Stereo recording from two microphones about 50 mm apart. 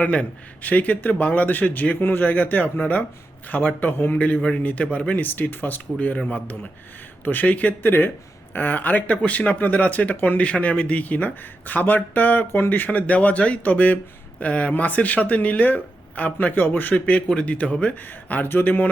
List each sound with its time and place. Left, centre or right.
0.0 s a man's voice: left
12.5 s speech: left
16.9 s a man's voice: left